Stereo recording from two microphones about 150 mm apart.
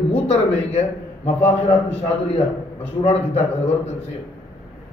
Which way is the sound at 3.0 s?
45° left (ahead or behind).